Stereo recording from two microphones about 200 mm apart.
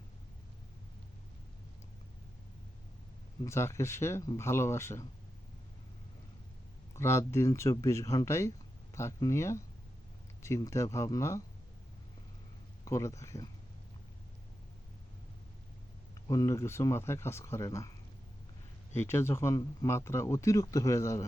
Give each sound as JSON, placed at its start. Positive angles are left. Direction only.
{"t": 3.4, "sound": "speech", "side_deg": 15}
{"t": 6.9, "sound": "speech", "side_deg": 15}
{"t": 12.8, "sound": "speech", "side_deg": 15}
{"t": 16.2, "sound": "speech", "side_deg": 15}
{"t": 18.9, "sound": "speech", "side_deg": 10}